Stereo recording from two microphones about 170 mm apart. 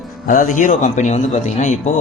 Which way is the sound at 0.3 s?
50° left (ahead or behind).